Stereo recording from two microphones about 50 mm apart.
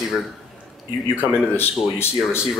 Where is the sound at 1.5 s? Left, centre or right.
Left.